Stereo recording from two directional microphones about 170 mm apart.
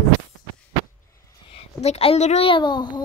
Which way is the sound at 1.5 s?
35° left (ahead or behind).